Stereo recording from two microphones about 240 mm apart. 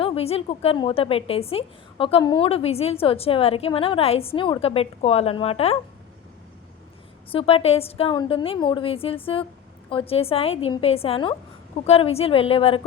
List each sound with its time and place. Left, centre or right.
0.0 s a woman's voice: left
7.3 s a woman's voice: left